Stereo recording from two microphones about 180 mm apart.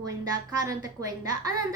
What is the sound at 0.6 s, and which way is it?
Speech, 20° right (ahead or behind).